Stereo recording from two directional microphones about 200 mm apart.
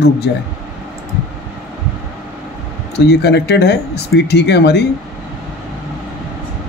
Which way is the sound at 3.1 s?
55° left (ahead or behind).